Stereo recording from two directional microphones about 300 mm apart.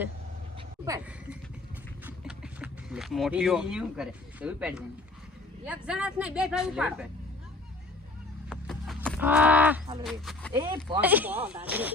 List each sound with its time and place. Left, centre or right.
0.9 s speech: centre
8.4 s a sound: centre
10.0 s speech: centre